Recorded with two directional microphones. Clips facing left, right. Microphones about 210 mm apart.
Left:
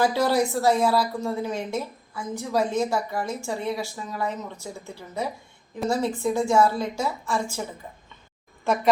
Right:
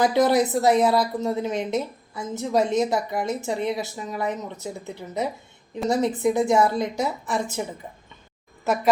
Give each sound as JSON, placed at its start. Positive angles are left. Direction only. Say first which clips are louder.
{"t": 0.0, "sound": "speech", "louder": "right 3 dB", "side_deg": -20}
{"t": 8.6, "sound": "speech", "louder": "even", "side_deg": -5}